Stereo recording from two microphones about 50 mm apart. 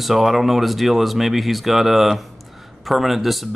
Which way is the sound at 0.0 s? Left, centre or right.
Centre.